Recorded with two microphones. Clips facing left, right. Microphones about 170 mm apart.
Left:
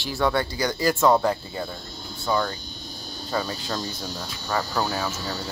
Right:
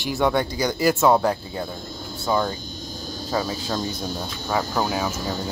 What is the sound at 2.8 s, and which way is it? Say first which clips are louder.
Cricket: right 5 dB; 45° right (ahead or behind).